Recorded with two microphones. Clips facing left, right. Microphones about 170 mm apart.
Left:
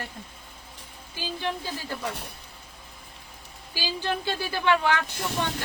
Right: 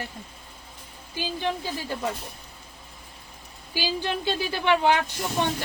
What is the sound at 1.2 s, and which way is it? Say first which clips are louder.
Speech: right 3 dB; 20° right (ahead or behind).